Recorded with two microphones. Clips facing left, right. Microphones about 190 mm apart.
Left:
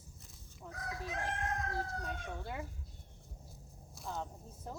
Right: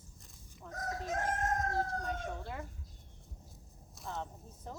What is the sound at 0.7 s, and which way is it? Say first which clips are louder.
Speech: right 5 dB; 45° right (ahead or behind).